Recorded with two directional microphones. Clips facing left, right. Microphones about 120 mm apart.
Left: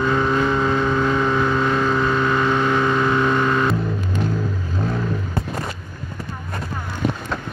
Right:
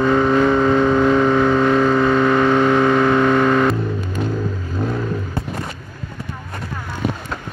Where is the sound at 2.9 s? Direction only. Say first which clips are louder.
Right 4 dB; 65° right (ahead or behind).